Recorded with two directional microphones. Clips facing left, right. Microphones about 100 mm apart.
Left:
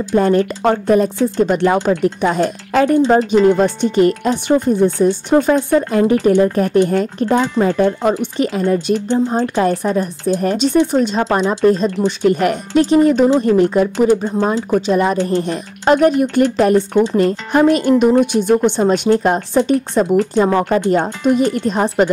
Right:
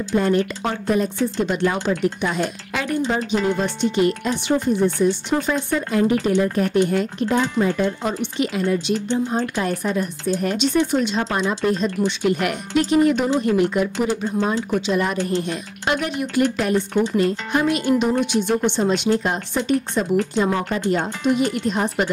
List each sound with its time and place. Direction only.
0.1 s speech: 45° left (ahead or behind)
19.5 s speech: 35° left (ahead or behind)
20.1 s speech: 45° left (ahead or behind)